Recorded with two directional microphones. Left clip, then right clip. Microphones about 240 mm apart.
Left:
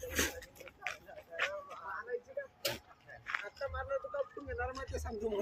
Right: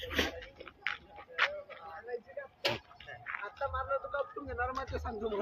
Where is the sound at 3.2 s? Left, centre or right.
Centre.